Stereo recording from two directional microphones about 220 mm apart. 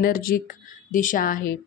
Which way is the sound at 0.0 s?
40° left (ahead or behind).